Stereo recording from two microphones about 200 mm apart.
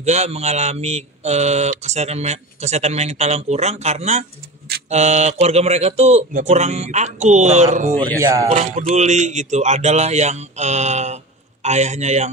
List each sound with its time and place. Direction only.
0.0 s mantra: 30° right (ahead or behind)